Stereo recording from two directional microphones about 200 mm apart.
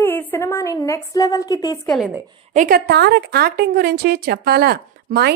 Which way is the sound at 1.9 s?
Centre (ahead or behind).